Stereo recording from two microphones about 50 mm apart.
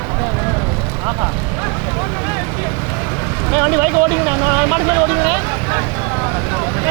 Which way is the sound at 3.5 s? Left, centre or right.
Right.